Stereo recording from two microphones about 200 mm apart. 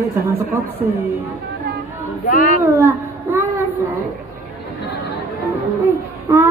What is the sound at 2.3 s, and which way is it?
Speech, 40° left (ahead or behind).